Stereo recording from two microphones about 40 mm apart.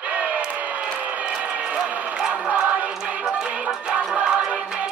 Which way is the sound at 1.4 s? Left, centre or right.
Right.